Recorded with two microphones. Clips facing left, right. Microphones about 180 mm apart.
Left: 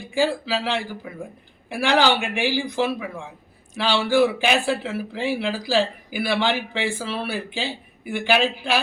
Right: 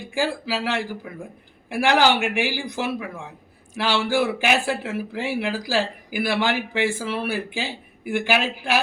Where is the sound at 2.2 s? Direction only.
10° right (ahead or behind).